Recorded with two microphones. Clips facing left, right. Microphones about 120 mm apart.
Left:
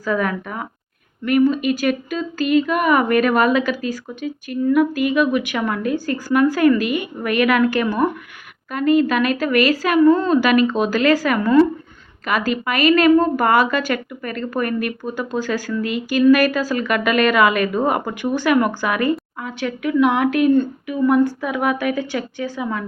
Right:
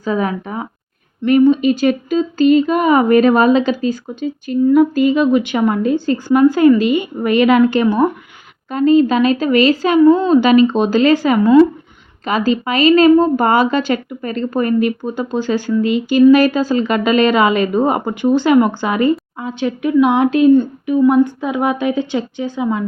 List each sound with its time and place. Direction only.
0.0 s speech: 20° right (ahead or behind)